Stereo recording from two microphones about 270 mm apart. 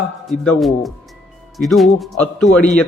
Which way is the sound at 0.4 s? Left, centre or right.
Centre.